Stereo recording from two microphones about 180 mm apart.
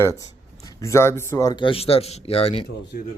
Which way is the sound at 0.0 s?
20° left (ahead or behind).